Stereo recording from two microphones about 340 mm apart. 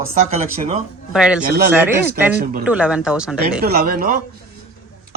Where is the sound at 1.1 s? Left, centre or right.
Centre.